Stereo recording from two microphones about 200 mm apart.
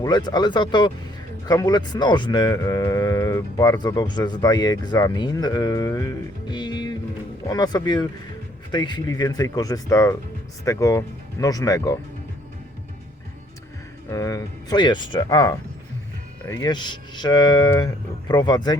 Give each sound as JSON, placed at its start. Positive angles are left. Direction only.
{"t": 0.0, "sound": "speech", "side_deg": 20}
{"t": 14.1, "sound": "speech", "side_deg": 15}